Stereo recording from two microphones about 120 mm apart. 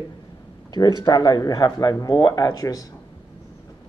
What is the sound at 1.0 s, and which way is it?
Speech, 30° left (ahead or behind).